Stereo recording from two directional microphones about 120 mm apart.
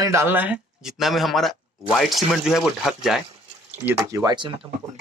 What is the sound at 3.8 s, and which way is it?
Speech, 25° right (ahead or behind).